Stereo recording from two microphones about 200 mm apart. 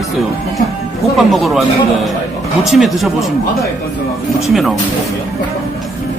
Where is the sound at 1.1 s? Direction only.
Centre (ahead or behind).